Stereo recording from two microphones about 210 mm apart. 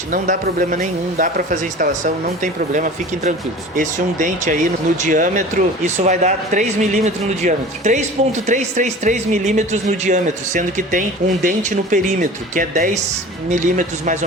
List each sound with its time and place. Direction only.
0.1 s speech: 40° right (ahead or behind)